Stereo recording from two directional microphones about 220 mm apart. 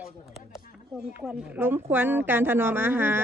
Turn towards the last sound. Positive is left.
turn(degrees=-10)  # may be behind; listen again after turning